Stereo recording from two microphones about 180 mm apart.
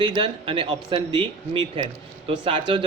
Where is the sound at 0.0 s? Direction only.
30° right (ahead or behind).